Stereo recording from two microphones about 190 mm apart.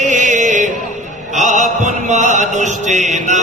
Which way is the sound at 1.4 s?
40° right (ahead or behind).